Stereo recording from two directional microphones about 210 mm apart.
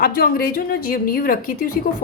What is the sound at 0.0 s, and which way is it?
A woman's voice, 45° left (ahead or behind).